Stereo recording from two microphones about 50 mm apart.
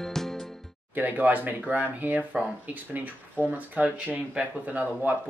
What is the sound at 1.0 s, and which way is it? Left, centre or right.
Speech, right.